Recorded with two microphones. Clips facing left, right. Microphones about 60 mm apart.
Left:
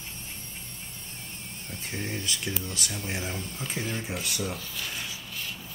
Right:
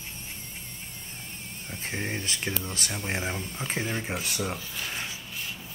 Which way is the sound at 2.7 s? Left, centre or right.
Right.